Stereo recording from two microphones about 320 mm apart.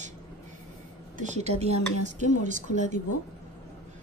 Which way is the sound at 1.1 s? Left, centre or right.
Right.